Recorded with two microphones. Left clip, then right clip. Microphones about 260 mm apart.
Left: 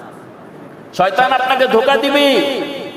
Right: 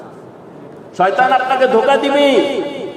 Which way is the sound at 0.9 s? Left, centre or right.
Left.